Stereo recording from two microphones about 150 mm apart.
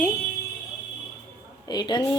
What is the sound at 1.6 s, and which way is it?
Speech, 30° left (ahead or behind).